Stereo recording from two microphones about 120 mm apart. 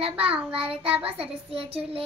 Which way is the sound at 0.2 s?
50° right (ahead or behind).